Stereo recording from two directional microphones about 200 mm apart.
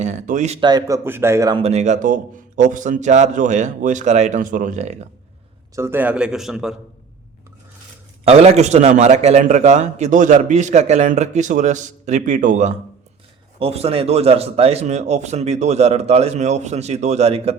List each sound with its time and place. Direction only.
0.0 s a man's voice: 35° right (ahead or behind)
0.7 s a man's voice: 20° right (ahead or behind)
1.6 s a man's voice: 35° right (ahead or behind)
5.7 s a man's voice: 10° right (ahead or behind)
8.3 s a man's voice: 30° right (ahead or behind)